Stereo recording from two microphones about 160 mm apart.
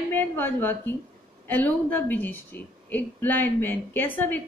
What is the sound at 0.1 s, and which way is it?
A woman's voice, 15° left (ahead or behind).